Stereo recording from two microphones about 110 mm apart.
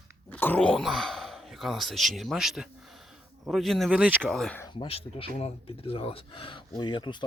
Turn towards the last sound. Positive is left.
turn(degrees=45)  # may be behind; listen again after turning